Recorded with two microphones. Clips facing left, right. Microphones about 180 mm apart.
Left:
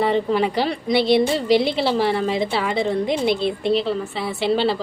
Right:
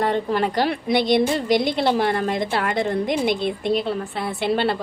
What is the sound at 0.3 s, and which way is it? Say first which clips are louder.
Speech: left 1 dB; 5° left (ahead or behind).